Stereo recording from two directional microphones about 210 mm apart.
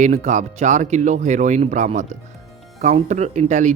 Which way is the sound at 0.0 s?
35° right (ahead or behind).